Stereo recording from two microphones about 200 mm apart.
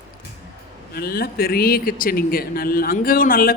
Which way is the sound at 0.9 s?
50° left (ahead or behind).